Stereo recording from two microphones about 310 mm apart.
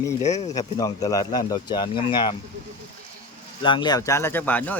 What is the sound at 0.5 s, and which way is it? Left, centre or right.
Speech, centre.